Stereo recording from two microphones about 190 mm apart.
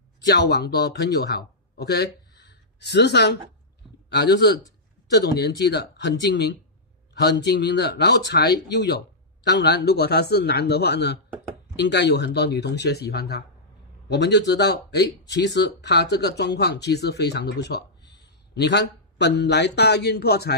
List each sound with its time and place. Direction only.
0.3 s speech: 60° left (ahead or behind)
2.4 s a sound: 60° left (ahead or behind)
4.1 s speech: 65° left (ahead or behind)